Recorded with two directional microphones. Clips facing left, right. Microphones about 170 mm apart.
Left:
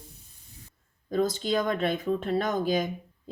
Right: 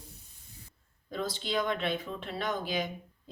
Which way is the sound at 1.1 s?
45° left (ahead or behind).